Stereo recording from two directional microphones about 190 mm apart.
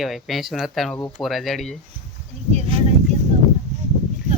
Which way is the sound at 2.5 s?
30° right (ahead or behind).